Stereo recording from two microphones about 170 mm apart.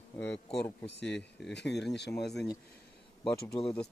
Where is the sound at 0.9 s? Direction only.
90° left.